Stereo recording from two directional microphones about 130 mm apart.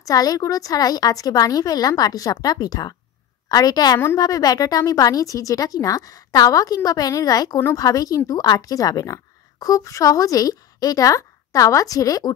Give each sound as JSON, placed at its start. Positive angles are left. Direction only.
{"t": 0.0, "sound": "speech", "side_deg": 30}
{"t": 7.5, "sound": "a woman's voice", "side_deg": 20}
{"t": 7.8, "sound": "a woman's voice", "side_deg": 30}